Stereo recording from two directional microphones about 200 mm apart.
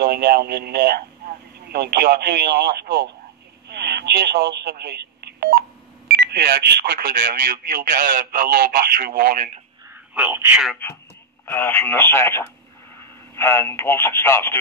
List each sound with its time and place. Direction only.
0.0 s speech: 55° right (ahead or behind)
10.1 s speech: 10° right (ahead or behind)
11.4 s speech: 10° left (ahead or behind)